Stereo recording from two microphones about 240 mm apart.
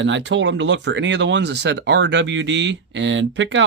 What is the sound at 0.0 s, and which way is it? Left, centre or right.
Speech, right.